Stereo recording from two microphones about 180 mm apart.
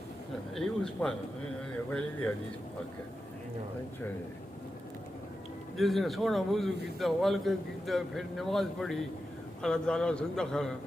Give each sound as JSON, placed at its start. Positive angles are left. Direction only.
{"t": 0.5, "sound": "a man's voice", "side_deg": 5}
{"t": 5.7, "sound": "a man's voice", "side_deg": 0}